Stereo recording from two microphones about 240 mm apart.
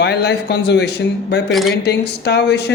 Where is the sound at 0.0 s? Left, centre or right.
Left.